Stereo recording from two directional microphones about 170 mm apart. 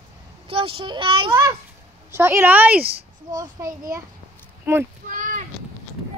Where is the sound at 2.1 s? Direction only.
15° right (ahead or behind).